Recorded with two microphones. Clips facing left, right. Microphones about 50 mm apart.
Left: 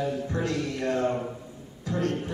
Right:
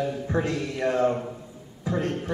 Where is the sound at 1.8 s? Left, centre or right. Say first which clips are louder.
Right 1 dB; centre.